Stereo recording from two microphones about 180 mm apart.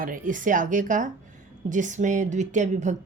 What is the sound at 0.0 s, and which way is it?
A woman's voice, 50° right (ahead or behind).